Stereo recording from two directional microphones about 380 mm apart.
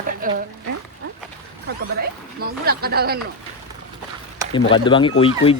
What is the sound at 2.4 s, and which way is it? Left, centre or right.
Speech, right.